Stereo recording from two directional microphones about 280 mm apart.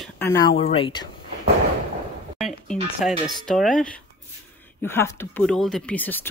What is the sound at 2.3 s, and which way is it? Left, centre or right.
Music, centre.